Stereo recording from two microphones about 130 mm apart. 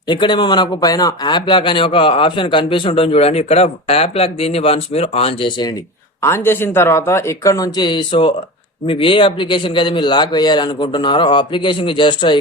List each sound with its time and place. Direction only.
0.1 s speech: 35° left (ahead or behind)
6.2 s speech: 20° left (ahead or behind); by 12.4 s 40° left (ahead or behind)